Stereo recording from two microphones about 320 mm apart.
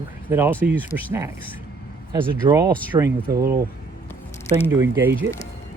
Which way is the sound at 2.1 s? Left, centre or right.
Centre.